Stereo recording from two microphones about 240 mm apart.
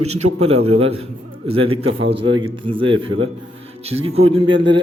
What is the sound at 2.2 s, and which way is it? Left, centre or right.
A man's voice, right.